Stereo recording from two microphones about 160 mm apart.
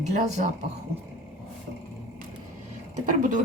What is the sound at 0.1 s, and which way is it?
Speech, 50° right (ahead or behind).